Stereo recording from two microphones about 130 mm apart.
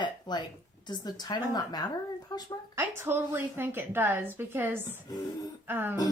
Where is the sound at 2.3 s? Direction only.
30° left (ahead or behind).